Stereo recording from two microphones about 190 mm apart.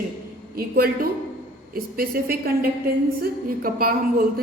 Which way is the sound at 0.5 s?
50° right (ahead or behind).